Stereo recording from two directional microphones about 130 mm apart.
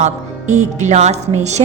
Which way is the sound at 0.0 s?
65° right (ahead or behind).